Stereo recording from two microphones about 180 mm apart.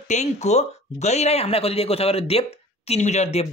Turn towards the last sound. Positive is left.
turn(degrees=35)  # may be behind; listen again after turning